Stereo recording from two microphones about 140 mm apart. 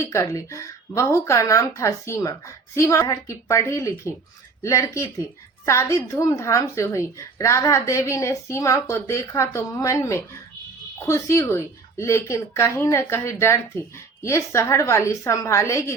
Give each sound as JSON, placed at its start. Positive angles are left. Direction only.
{"t": 0.0, "sound": "a woman's voice", "side_deg": 20}